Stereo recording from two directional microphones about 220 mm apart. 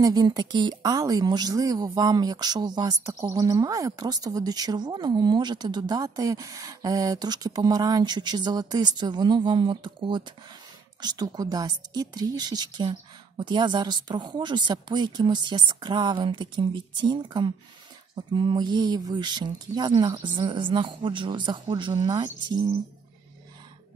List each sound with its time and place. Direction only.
0.0 s a woman's voice: 15° right (ahead or behind)